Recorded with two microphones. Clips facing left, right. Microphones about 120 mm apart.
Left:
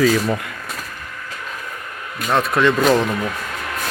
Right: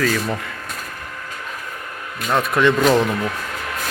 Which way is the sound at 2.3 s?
Centre (ahead or behind).